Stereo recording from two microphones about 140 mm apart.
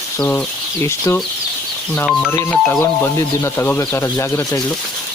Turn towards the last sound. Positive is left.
turn(degrees=20)  # may be behind; listen again after turning